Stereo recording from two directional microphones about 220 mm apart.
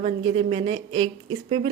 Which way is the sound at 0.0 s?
25° right (ahead or behind).